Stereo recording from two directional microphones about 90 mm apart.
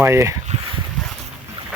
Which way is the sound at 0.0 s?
30° right (ahead or behind).